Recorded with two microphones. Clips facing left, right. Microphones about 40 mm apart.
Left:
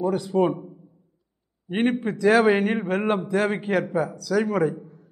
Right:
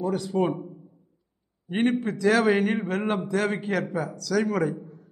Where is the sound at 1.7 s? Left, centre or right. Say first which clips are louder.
Left 1 dB; centre.